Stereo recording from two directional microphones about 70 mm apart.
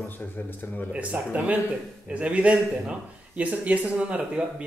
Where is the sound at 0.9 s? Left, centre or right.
Centre.